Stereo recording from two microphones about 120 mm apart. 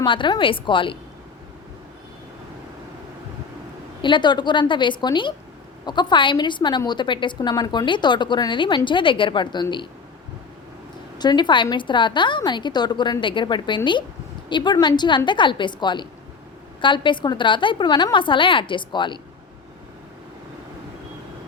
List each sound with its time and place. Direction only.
0.0 s a woman's voice: 40° left (ahead or behind)
4.0 s a woman's voice: 40° left (ahead or behind)
11.2 s a woman's voice: 40° left (ahead or behind)